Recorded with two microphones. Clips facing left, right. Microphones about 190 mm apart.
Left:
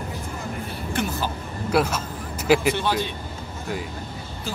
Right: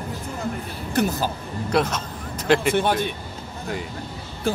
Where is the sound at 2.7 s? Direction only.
50° right (ahead or behind).